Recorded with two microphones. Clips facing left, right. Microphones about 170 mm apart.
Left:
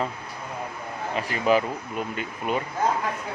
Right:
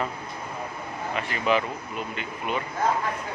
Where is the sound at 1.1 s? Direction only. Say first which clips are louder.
Left 3 dB; 35° left (ahead or behind).